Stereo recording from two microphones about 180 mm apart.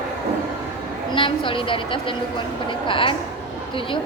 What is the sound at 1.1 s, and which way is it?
A woman's voice, 30° left (ahead or behind).